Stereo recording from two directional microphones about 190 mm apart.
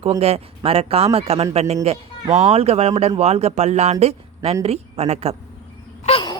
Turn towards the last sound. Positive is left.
turn(degrees=25)  # may be behind; listen again after turning